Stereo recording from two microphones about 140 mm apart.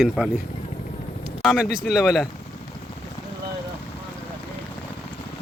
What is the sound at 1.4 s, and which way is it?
Speech, 5° right (ahead or behind).